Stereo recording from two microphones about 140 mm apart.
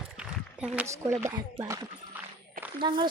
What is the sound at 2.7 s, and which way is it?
Speech, 35° right (ahead or behind).